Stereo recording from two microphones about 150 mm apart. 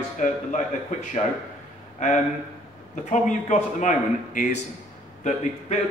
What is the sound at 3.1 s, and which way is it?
Speech, 55° left (ahead or behind).